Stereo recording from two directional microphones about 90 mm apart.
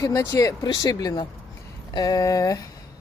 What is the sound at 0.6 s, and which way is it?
Speech, 45° left (ahead or behind).